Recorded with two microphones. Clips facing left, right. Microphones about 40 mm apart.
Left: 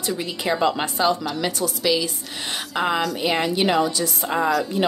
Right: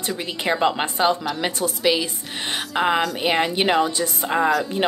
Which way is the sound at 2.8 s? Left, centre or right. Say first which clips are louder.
Right 2 dB; centre.